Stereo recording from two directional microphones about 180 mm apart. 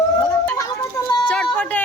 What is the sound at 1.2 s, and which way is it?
Music, 10° left (ahead or behind).